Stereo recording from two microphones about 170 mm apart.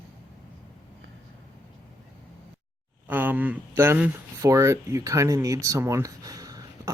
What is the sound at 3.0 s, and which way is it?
Speech, 10° right (ahead or behind).